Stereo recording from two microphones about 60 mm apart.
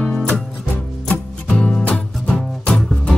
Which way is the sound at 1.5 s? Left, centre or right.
Centre.